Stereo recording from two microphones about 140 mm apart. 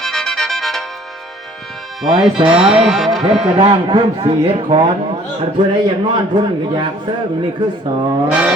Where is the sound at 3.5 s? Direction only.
35° right (ahead or behind).